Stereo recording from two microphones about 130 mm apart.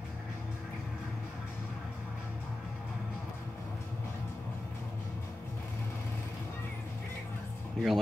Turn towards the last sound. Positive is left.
turn(degrees=5)  # may be behind; listen again after turning